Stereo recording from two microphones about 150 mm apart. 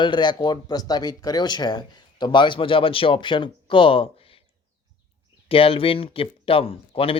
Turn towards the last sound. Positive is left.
turn(degrees=40)  # may be behind; listen again after turning